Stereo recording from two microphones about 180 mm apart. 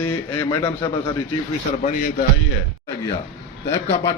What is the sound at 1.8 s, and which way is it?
Speech, 50° left (ahead or behind).